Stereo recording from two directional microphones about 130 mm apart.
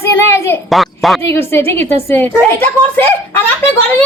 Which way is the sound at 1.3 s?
20° left (ahead or behind).